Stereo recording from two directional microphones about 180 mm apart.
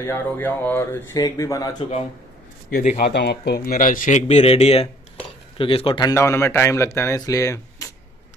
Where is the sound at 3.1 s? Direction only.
70° left (ahead or behind); by 6.1 s 30° left (ahead or behind).